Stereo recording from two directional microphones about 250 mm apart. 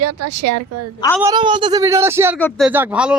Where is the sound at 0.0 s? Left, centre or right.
Right.